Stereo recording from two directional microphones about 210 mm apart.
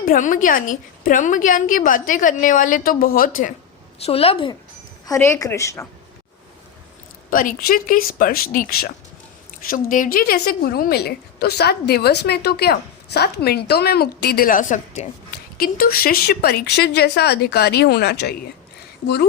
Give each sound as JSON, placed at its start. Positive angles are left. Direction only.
{"t": 0.0, "sound": "a woman's voice", "side_deg": 40}
{"t": 4.0, "sound": "a woman's voice", "side_deg": 30}
{"t": 5.0, "sound": "a woman's voice", "side_deg": 15}
{"t": 7.3, "sound": "a woman's voice", "side_deg": 40}